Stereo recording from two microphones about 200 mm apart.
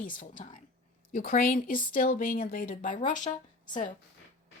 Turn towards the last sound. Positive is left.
turn(degrees=40)  # may be behind; listen again after turning